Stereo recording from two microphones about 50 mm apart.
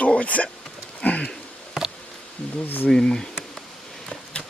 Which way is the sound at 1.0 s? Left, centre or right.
Left.